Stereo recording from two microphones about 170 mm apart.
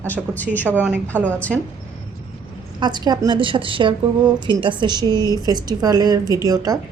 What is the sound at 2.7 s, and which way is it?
A woman's voice, 25° right (ahead or behind).